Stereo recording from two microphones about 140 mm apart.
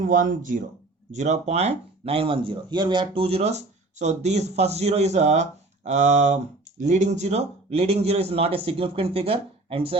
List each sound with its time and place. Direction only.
0.0 s speech: 75° right (ahead or behind)
1.1 s speech: 55° right (ahead or behind)